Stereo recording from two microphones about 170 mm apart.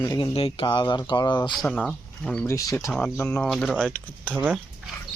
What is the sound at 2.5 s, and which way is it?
Speech, 20° left (ahead or behind).